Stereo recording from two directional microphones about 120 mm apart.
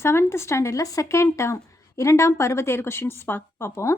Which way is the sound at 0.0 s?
20° left (ahead or behind).